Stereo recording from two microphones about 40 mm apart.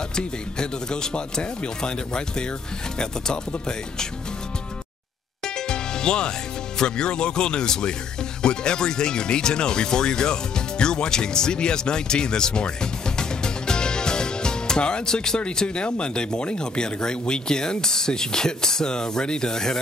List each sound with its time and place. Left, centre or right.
0.1 s speech: centre
5.7 s music: centre
6.8 s speech: left